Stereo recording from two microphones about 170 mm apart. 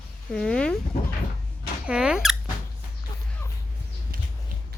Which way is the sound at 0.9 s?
60° left (ahead or behind).